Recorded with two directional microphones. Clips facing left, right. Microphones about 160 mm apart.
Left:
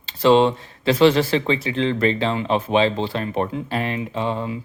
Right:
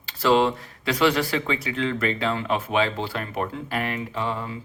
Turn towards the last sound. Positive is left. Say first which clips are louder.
# left 4 dB
turn(degrees=20)  # may be behind; listen again after turning